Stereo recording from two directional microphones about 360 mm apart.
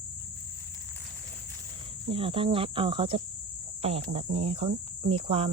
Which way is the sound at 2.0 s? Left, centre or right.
Centre.